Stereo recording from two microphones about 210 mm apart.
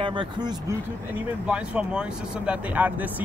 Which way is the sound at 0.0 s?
25° right (ahead or behind).